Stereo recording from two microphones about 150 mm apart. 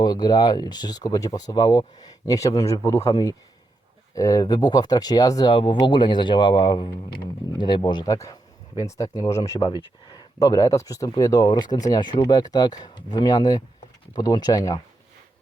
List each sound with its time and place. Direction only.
0.0 s speech: 25° left (ahead or behind)